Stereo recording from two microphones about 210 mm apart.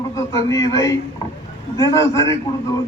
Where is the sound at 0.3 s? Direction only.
15° left (ahead or behind).